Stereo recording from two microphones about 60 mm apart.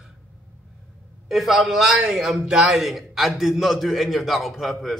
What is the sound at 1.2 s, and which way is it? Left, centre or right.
A man's voice, centre.